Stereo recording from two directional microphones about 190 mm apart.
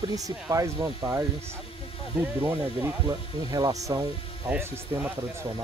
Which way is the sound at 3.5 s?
20° right (ahead or behind).